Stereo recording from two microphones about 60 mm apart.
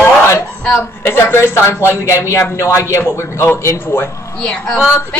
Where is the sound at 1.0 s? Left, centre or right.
Left.